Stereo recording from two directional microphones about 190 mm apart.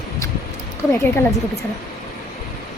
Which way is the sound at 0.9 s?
15° left (ahead or behind).